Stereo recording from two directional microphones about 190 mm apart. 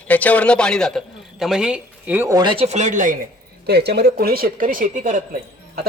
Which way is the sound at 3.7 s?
60° right (ahead or behind).